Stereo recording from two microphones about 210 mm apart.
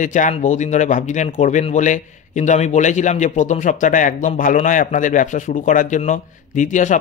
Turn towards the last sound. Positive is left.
turn(degrees=35)  # may be behind; listen again after turning